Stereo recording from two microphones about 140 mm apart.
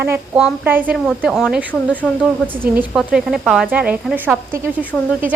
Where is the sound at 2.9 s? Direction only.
5° right (ahead or behind).